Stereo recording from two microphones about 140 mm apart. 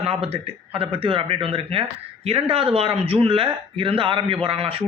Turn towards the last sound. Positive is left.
turn(degrees=-40)  # may be behind; listen again after turning